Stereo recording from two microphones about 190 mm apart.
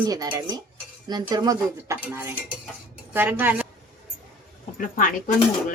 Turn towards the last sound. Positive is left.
turn(degrees=45)  # may be behind; listen again after turning